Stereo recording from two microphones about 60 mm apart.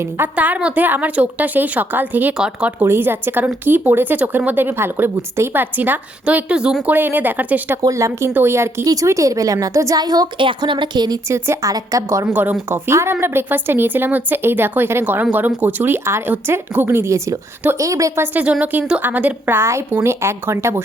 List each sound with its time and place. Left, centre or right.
0.3 s a woman's voice: right
2.8 s a woman's voice: right
6.2 s a woman's voice: centre
6.8 s a woman's voice: right
7.8 s speech: right
8.3 s a woman's voice: right
8.8 s a woman's voice: right
11.3 s a woman's voice: right
11.6 s a woman's voice: right
12.2 s a woman's voice: right
12.6 s a woman's voice: right
16.0 s a woman's voice: right
18.6 s a woman's voice: right